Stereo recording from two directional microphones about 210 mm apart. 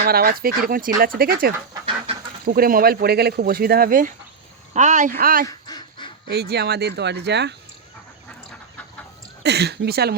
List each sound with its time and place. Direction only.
0.0 s speech: 45° right (ahead or behind)
5.6 s duck: 20° left (ahead or behind)
6.2 s speech: 50° right (ahead or behind)
9.4 s speech: 50° right (ahead or behind)